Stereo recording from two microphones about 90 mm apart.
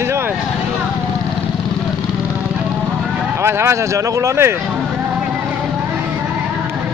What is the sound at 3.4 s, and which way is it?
Speech, 30° right (ahead or behind).